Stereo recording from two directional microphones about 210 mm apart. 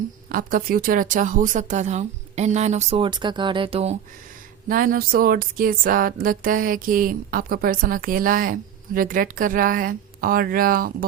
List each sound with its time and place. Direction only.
0.3 s speech: 40° right (ahead or behind)
4.7 s speech: 40° right (ahead or behind)